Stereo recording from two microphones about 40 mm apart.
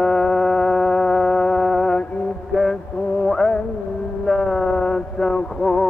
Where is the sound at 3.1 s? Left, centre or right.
Centre.